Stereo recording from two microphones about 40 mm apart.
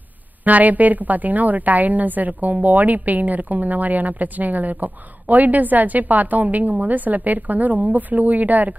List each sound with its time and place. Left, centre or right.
0.4 s a woman's voice: right